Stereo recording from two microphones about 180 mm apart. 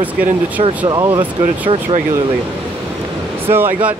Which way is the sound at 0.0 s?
10° right (ahead or behind).